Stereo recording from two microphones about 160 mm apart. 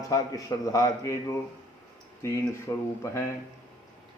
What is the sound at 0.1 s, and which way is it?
A man's voice, 20° left (ahead or behind).